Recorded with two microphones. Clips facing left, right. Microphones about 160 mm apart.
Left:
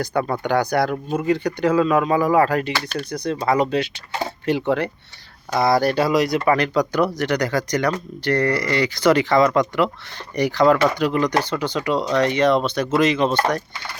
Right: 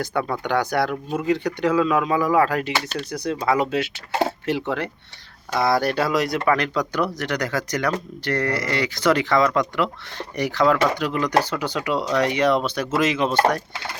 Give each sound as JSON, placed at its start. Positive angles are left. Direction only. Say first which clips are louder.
{"t": 0.1, "sound": "speech", "louder": "left 2 dB", "side_deg": 50}
{"t": 0.6, "sound": "speech", "louder": "left 2 dB", "side_deg": 0}